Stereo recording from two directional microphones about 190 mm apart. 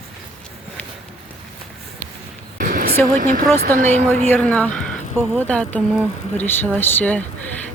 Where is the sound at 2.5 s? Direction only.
45° right (ahead or behind).